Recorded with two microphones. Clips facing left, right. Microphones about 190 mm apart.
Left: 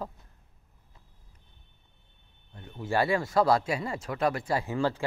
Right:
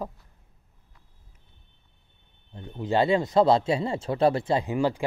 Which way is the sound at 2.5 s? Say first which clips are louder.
Right 4 dB; 20° right (ahead or behind).